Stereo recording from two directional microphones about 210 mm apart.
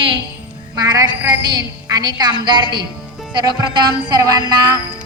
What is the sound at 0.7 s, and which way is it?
Music, 15° right (ahead or behind).